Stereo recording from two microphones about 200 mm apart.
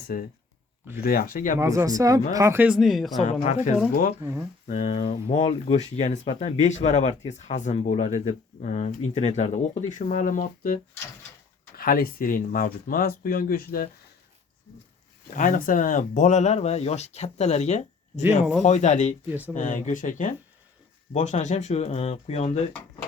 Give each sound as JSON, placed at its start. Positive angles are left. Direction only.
{"t": 0.1, "sound": "speech", "side_deg": 50}
{"t": 1.5, "sound": "speech", "side_deg": -15}
{"t": 3.4, "sound": "speech", "side_deg": 35}
{"t": 4.2, "sound": "speech", "side_deg": -15}
{"t": 4.7, "sound": "speech", "side_deg": 30}
{"t": 11.8, "sound": "speech", "side_deg": 45}
{"t": 15.4, "sound": "speech", "side_deg": 45}
{"t": 19.3, "sound": "speech", "side_deg": -10}
{"t": 19.5, "sound": "speech", "side_deg": 40}